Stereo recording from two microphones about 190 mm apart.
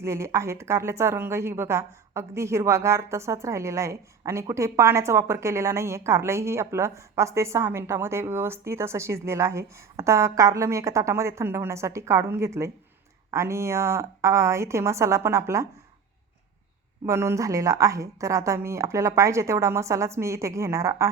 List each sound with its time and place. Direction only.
0.0 s speech: 15° right (ahead or behind)
17.1 s speech: 15° right (ahead or behind)